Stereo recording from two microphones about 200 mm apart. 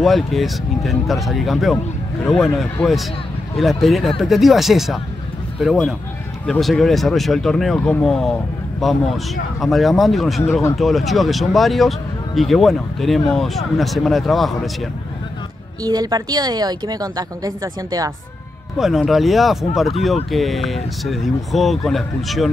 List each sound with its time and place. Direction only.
0.0 s speech: centre (ahead or behind)
15.8 s a woman's voice: 20° right (ahead or behind)
18.8 s speech: centre (ahead or behind)